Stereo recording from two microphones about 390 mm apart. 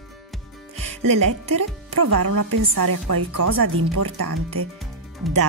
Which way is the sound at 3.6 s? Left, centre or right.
Right.